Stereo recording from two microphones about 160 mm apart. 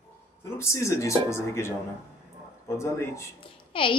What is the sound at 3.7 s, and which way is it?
Speech, 35° left (ahead or behind).